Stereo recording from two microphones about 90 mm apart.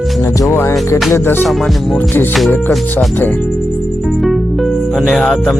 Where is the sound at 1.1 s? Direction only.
25° left (ahead or behind).